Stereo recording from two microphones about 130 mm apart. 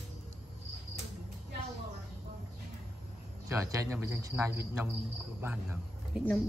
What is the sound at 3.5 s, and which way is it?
Speech, 25° right (ahead or behind).